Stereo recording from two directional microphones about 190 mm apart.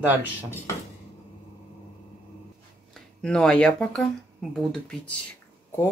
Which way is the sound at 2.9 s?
5° left (ahead or behind).